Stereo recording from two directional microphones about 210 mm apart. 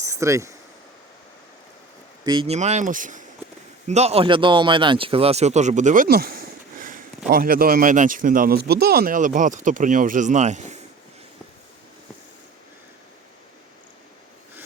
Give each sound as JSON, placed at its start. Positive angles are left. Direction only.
{"t": 0.0, "sound": "speech", "side_deg": -15}
{"t": 2.2, "sound": "a man's voice", "side_deg": -20}